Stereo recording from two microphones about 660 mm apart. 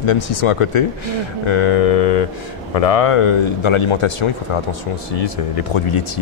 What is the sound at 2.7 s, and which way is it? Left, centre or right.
Speech, left.